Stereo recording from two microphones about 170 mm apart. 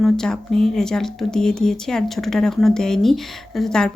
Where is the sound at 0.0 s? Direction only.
5° left (ahead or behind).